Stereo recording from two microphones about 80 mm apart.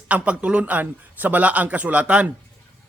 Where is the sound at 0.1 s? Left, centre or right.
Centre.